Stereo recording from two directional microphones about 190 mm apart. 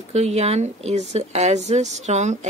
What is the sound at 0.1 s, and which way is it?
Speech, 35° right (ahead or behind).